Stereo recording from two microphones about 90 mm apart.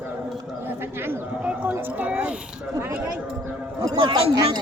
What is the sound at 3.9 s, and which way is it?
Speech, 70° right (ahead or behind).